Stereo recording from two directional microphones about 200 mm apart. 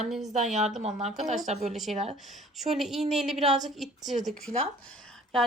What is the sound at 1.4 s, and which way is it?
Speech, 35° right (ahead or behind).